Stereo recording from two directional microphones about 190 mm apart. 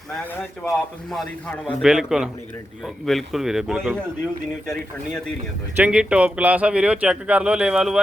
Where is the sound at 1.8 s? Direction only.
5° right (ahead or behind).